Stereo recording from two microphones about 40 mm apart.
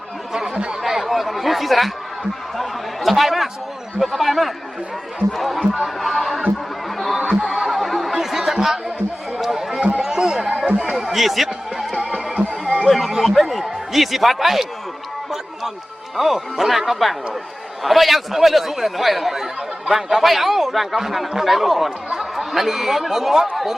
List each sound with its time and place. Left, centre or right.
0.3 s chatter: right
0.8 s chatter: centre
4.0 s speech: centre
5.8 s music: centre
7.4 s a sound: centre
9.4 s run: centre
10.0 s a sound: centre
12.1 s music: right
12.9 s a man's voice: centre
16.1 s speech: centre